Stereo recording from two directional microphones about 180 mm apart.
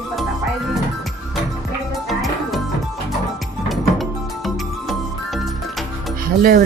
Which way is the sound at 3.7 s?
Centre (ahead or behind).